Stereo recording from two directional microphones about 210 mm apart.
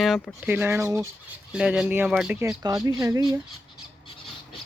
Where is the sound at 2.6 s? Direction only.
20° right (ahead or behind).